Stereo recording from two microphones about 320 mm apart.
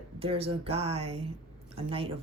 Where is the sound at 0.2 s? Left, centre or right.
Centre.